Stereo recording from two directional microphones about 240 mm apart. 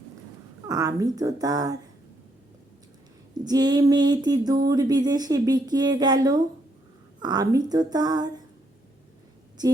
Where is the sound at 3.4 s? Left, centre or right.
Centre.